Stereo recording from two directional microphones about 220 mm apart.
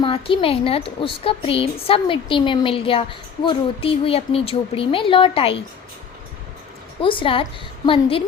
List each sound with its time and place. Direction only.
0.0 s a woman's voice: 25° left (ahead or behind)
7.0 s a woman's voice: 25° left (ahead or behind)